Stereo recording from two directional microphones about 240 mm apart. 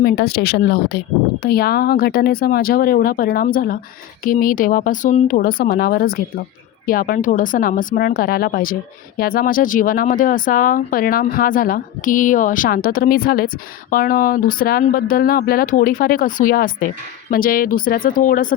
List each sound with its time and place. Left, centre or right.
0.0 s speech: left